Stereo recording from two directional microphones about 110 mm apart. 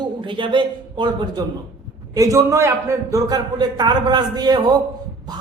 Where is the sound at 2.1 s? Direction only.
30° right (ahead or behind).